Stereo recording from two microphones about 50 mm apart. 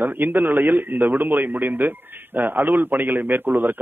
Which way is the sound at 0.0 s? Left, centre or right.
Right.